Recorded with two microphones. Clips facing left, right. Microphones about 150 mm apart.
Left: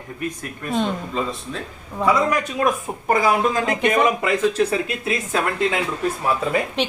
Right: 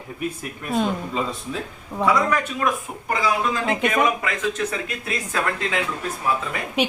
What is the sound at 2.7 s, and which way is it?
Speech, 50° left (ahead or behind).